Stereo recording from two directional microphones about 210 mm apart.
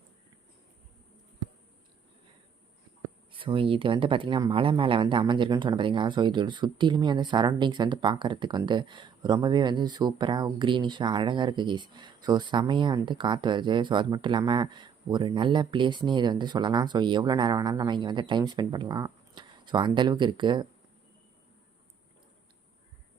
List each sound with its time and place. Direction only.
3.3 s speech: 25° right (ahead or behind)